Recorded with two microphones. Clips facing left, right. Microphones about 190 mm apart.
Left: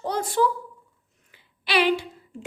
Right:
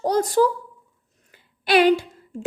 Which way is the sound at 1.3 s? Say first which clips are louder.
Right 6 dB; 45° right (ahead or behind).